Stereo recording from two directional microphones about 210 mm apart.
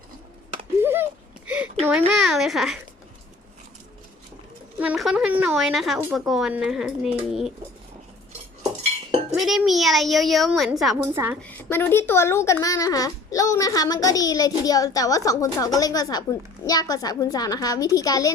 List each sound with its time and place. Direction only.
0.8 s a sound: 10° right (ahead or behind)
1.8 s a woman's voice: 5° right (ahead or behind)
4.8 s a woman's voice: 5° right (ahead or behind)
9.3 s a woman's voice: 5° right (ahead or behind)
11.0 s a woman's voice: 10° right (ahead or behind)
11.4 s a child's voice: 10° left (ahead or behind)